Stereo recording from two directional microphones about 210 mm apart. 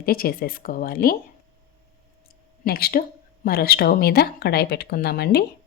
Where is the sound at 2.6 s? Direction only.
45° left (ahead or behind).